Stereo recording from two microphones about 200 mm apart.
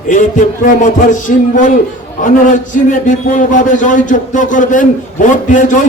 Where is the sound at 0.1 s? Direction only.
40° left (ahead or behind).